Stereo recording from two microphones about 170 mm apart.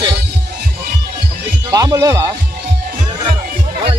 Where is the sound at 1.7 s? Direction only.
20° right (ahead or behind).